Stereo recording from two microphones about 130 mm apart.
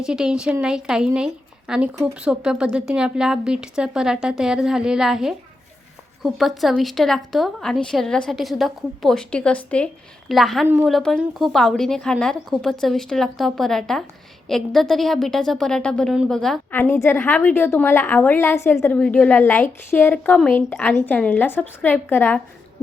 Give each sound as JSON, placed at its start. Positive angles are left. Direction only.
{"t": 0.0, "sound": "a woman's voice", "side_deg": -5}
{"t": 16.7, "sound": "a woman's voice", "side_deg": 15}